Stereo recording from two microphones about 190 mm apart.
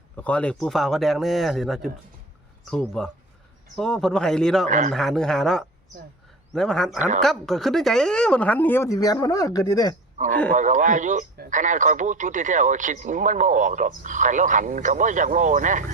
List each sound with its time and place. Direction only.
0.2 s speech: 5° left (ahead or behind)
10.2 s speech: 40° right (ahead or behind)